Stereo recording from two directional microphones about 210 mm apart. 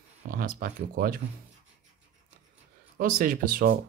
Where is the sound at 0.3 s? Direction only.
40° right (ahead or behind).